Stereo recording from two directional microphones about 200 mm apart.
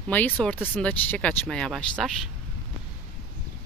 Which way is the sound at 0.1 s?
5° left (ahead or behind).